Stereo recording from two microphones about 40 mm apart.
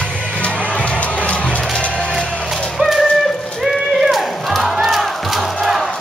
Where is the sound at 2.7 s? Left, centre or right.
Centre.